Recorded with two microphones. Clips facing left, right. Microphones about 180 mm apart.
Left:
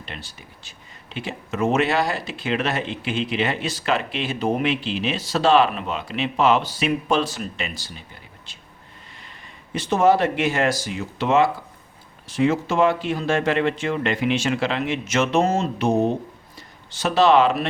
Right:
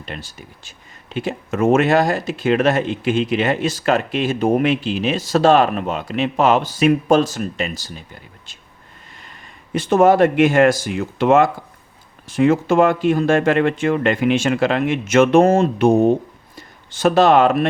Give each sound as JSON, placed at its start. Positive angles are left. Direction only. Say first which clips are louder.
{"t": 0.0, "sound": "speech", "louder": "right 5 dB", "side_deg": -45}
{"t": 9.7, "sound": "speech", "louder": "right 5 dB", "side_deg": -50}